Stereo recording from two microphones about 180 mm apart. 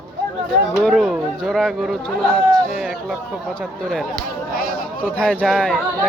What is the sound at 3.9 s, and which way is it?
Speech, centre (ahead or behind).